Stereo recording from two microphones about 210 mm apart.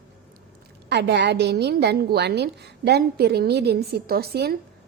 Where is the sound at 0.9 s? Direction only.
50° right (ahead or behind).